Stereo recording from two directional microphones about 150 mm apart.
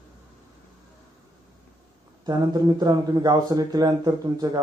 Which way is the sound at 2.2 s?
25° right (ahead or behind).